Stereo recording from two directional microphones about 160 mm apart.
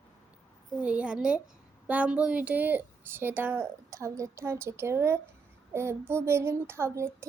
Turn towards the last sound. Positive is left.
turn(degrees=-15)  # may be behind; listen again after turning